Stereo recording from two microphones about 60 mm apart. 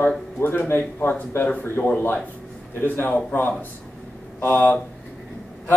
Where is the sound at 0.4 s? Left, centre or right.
Left.